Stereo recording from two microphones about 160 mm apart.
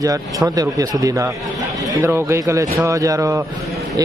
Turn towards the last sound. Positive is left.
turn(degrees=-20)  # may be behind; listen again after turning